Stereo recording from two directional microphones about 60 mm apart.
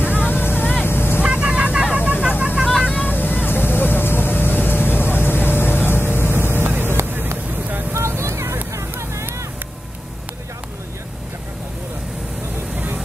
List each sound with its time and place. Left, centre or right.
0.0 s vehicle: right
0.3 s vehicle: left
1.2 s vehicle: centre
3.1 s vehicle: left
6.3 s vehicle: right
7.9 s vehicle: right
12.7 s vehicle: right